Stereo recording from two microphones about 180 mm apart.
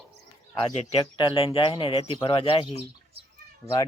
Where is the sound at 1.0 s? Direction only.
25° left (ahead or behind).